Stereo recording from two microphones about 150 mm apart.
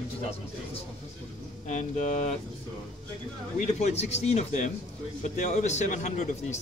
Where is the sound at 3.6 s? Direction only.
45° left (ahead or behind).